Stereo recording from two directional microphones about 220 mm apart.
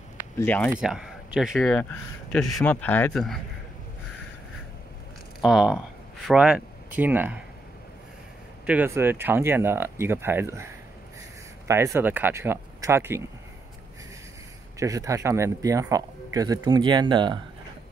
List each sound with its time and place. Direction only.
0.4 s speech: 5° left (ahead or behind)
5.4 s speech: 5° right (ahead or behind)
8.6 s speech: 10° right (ahead or behind)
14.8 s speech: 15° right (ahead or behind)